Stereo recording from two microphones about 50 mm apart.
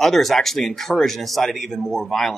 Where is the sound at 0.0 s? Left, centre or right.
Centre.